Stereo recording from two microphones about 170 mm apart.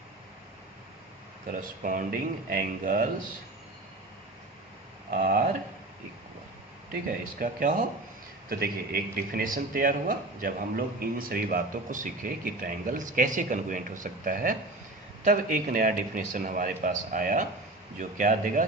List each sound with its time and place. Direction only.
1.6 s speech: 55° right (ahead or behind)
5.1 s speech: 55° right (ahead or behind)
6.9 s a man's voice: 55° right (ahead or behind)